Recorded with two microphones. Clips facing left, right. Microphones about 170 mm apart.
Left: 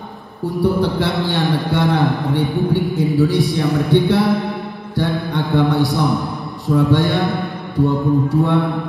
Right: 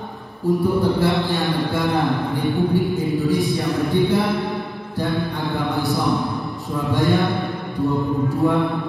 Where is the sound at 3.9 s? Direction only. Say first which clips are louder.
Left 4 dB; 75° left (ahead or behind).